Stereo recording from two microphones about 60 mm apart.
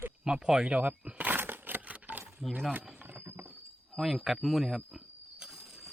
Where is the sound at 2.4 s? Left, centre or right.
Centre.